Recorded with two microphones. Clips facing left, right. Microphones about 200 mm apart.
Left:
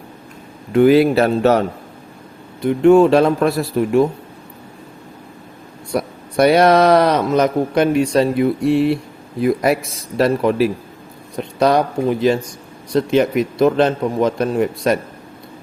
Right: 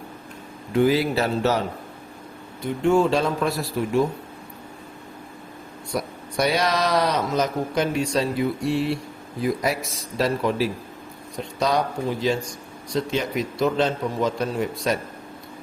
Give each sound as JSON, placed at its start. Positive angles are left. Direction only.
{"t": 0.7, "sound": "speech", "side_deg": 60}
{"t": 2.6, "sound": "speech", "side_deg": 60}
{"t": 5.9, "sound": "speech", "side_deg": 60}